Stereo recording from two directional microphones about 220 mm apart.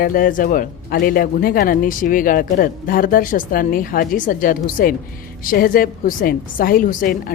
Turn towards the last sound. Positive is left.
turn(degrees=40)  # may be behind; listen again after turning